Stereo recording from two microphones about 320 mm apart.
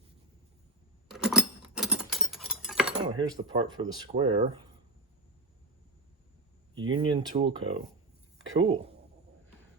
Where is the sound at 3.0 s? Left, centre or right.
Centre.